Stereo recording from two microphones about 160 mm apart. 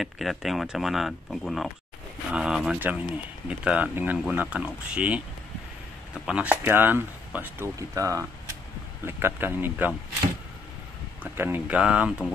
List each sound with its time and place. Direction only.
0.0 s speech: centre (ahead or behind)
11.3 s speech: 10° right (ahead or behind)